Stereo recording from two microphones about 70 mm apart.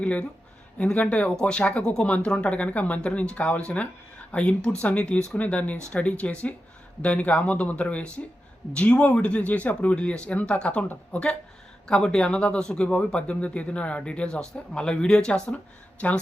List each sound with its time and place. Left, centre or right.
0.0 s speech: centre